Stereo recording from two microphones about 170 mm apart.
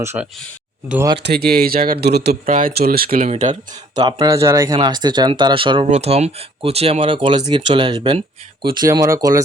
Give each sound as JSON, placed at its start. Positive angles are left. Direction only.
{"t": 0.0, "sound": "speech", "side_deg": -15}
{"t": 1.1, "sound": "speech", "side_deg": -80}
{"t": 2.3, "sound": "speech", "side_deg": -50}
{"t": 3.2, "sound": "speech", "side_deg": -45}
{"t": 3.5, "sound": "speech", "side_deg": -25}